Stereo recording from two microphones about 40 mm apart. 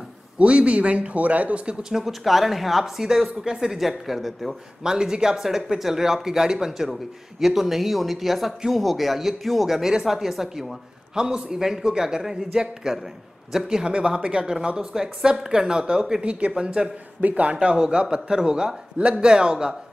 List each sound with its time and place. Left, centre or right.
0.4 s speech: right
1.7 s a man's voice: centre
4.8 s a man's voice: centre
16.5 s speech: centre
17.2 s speech: right; by 19.8 s centre